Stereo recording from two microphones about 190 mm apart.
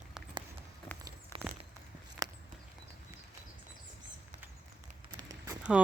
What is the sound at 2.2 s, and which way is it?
Walk, 20° right (ahead or behind).